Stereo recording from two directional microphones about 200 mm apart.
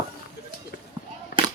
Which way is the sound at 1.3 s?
55° left (ahead or behind).